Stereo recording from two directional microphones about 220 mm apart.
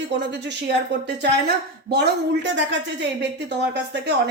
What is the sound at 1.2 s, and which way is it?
A woman's voice, 50° right (ahead or behind).